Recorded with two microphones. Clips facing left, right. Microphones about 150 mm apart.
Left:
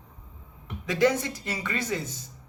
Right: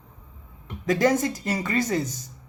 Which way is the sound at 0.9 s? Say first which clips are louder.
Right 3 dB; 45° right (ahead or behind).